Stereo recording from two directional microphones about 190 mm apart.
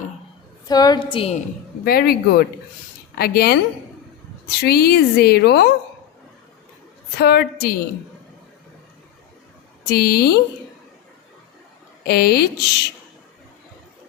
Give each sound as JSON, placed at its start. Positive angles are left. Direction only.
{"t": 0.7, "sound": "a woman's voice", "side_deg": 20}
{"t": 1.8, "sound": "speech", "side_deg": 50}
{"t": 3.2, "sound": "a woman's voice", "side_deg": 55}
{"t": 7.2, "sound": "a woman's voice", "side_deg": 60}
{"t": 9.8, "sound": "a woman's voice", "side_deg": 55}
{"t": 12.0, "sound": "a woman's voice", "side_deg": 55}